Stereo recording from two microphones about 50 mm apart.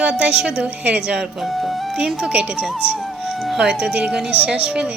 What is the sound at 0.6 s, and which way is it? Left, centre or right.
Speech, right.